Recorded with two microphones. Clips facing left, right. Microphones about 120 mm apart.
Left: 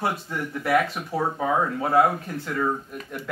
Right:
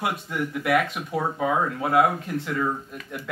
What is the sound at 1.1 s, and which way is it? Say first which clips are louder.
Speech: left 1 dB; 30° left (ahead or behind).